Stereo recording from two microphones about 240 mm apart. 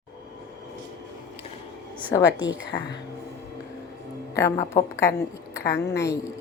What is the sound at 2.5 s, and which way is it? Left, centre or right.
Speech, left.